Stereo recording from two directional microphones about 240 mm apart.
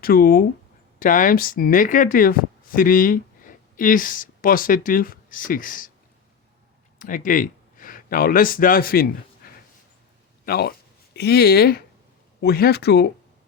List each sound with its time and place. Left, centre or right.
0.0 s speech: left
7.0 s speech: left
10.4 s speech: left